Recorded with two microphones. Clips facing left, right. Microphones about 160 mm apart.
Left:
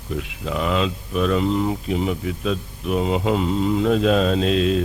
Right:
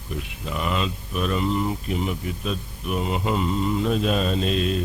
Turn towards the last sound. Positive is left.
turn(degrees=90)